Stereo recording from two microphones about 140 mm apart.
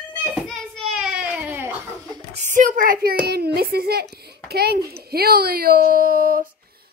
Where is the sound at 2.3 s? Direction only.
65° right (ahead or behind); by 3.2 s 90° right.